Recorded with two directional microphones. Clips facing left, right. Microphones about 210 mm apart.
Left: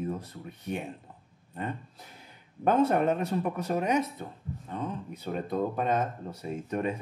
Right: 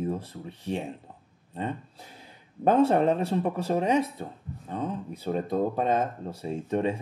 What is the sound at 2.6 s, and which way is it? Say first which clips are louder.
Speech: right 3 dB; 35° right (ahead or behind).